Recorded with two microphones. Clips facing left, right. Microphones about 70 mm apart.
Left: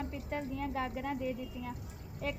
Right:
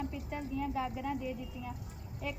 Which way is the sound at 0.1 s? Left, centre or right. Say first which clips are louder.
Left 1 dB; left.